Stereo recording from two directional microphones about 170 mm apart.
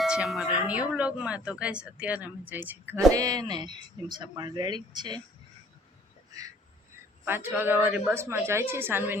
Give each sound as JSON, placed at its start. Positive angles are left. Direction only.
{"t": 0.0, "sound": "a sound", "side_deg": -5}
{"t": 0.7, "sound": "a woman's voice", "side_deg": -5}
{"t": 7.3, "sound": "a woman's voice", "side_deg": -10}